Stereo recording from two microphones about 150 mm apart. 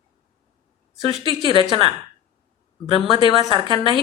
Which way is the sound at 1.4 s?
35° left (ahead or behind).